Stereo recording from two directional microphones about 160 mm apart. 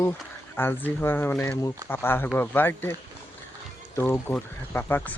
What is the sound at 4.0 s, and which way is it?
Speech, 15° left (ahead or behind).